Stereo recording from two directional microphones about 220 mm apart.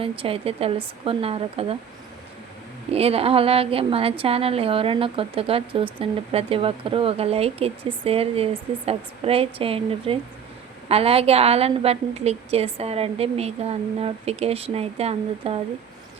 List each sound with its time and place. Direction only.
0.0 s a woman's voice: 25° right (ahead or behind)
2.9 s a woman's voice: 25° right (ahead or behind)